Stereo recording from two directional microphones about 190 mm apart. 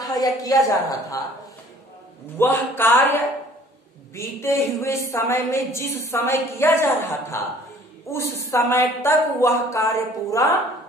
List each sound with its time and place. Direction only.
0.0 s a sound: 20° left (ahead or behind)
0.4 s a woman's voice: 20° left (ahead or behind)
2.3 s a woman's voice: 10° left (ahead or behind)
4.1 s a woman's voice: 15° left (ahead or behind)